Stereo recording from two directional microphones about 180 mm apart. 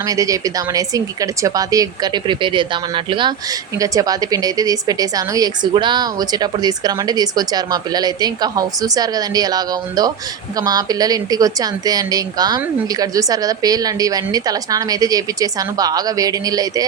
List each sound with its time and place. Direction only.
0.1 s a woman's voice: 20° right (ahead or behind)